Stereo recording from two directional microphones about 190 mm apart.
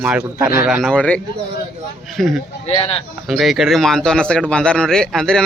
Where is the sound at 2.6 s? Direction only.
30° left (ahead or behind).